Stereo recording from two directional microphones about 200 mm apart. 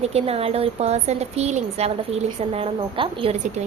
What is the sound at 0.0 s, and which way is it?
A woman's voice, 30° right (ahead or behind).